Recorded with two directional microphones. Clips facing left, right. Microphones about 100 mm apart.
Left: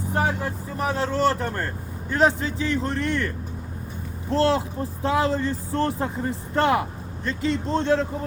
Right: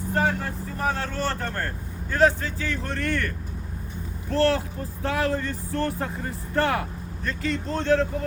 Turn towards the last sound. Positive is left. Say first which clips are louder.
# left 2 dB
turn(degrees=25)  # may be behind; listen again after turning